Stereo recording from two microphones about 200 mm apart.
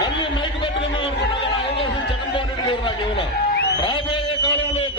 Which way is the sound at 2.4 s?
25° left (ahead or behind).